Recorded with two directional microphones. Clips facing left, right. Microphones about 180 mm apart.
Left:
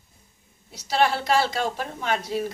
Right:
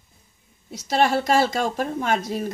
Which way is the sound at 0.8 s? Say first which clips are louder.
Right 2 dB; 45° right (ahead or behind).